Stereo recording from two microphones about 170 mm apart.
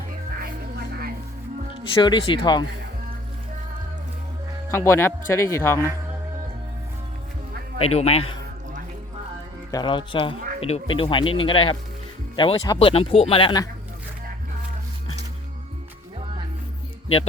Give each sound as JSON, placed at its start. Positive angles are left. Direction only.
{"t": 0.3, "sound": "music", "side_deg": -65}
{"t": 2.0, "sound": "speech", "side_deg": 30}
{"t": 4.7, "sound": "speech", "side_deg": 15}
{"t": 7.8, "sound": "speech", "side_deg": 40}
{"t": 9.7, "sound": "speech", "side_deg": 30}